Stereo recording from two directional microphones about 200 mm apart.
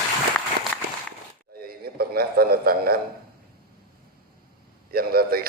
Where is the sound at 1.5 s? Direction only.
50° right (ahead or behind).